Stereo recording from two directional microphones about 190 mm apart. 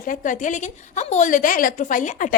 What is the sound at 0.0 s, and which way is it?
A woman's voice, 45° left (ahead or behind).